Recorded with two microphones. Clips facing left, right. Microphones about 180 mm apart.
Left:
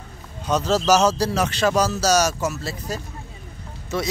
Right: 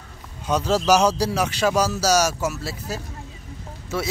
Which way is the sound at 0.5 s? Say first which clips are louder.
Even; 10° right (ahead or behind).